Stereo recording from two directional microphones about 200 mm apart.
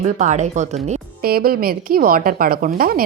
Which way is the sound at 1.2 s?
50° right (ahead or behind).